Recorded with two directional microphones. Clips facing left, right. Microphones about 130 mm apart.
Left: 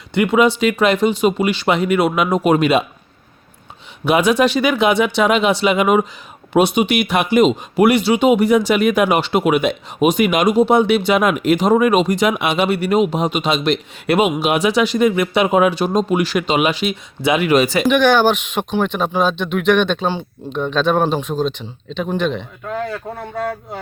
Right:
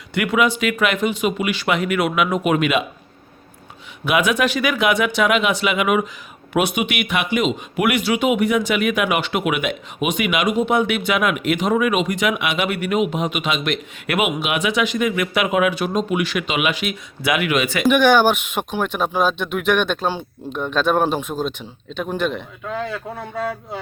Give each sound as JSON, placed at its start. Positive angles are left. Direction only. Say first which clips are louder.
{"t": 0.1, "sound": "speech", "louder": "left 4 dB", "side_deg": 25}
{"t": 4.0, "sound": "speech", "louder": "left 4 dB", "side_deg": 30}
{"t": 17.8, "sound": "speech", "louder": "right 3 dB", "side_deg": -10}